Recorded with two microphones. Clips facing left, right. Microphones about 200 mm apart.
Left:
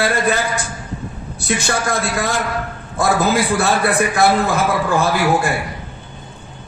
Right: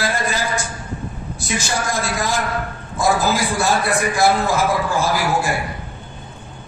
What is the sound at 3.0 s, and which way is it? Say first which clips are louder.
A man's voice: left 2 dB; 60° left (ahead or behind).